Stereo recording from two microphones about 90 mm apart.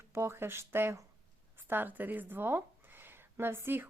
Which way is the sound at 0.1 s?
25° right (ahead or behind).